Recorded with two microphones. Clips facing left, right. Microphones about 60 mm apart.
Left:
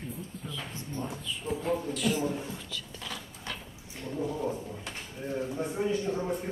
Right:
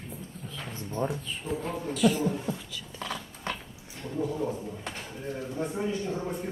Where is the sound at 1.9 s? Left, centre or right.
Centre.